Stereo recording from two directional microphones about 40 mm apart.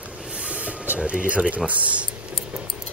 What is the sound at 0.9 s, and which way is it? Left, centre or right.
Speech, right.